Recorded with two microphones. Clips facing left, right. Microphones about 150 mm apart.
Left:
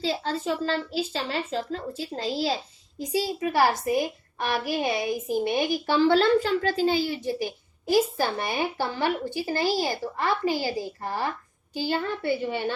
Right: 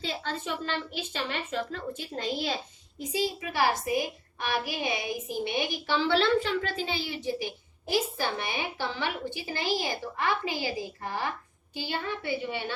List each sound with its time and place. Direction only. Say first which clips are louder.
0.0 s a woman's voice: left 6 dB; 35° left (ahead or behind)